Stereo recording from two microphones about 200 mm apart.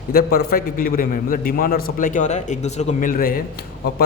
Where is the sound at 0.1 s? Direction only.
50° left (ahead or behind).